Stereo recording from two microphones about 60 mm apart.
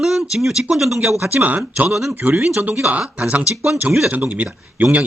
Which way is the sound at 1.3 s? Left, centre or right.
Right.